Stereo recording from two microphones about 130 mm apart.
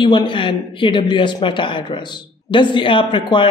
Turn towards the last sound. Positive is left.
turn(degrees=40)  # may be behind; listen again after turning